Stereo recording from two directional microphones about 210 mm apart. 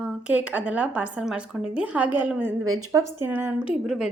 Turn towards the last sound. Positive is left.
turn(degrees=-5)  # may be behind; listen again after turning